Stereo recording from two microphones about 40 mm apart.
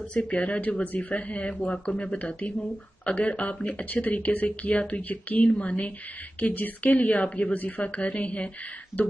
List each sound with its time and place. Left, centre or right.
0.1 s a woman's voice: left